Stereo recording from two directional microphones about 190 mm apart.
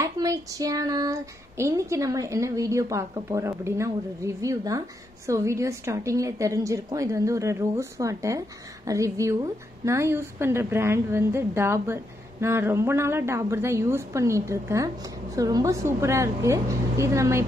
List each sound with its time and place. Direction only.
0.0 s child singing: 20° right (ahead or behind)